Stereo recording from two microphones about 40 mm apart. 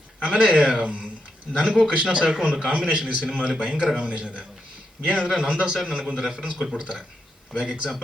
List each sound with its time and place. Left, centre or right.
0.2 s a man's voice: centre
0.9 s a man's voice: right